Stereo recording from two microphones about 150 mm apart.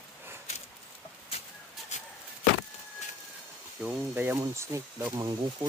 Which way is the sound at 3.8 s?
15° right (ahead or behind).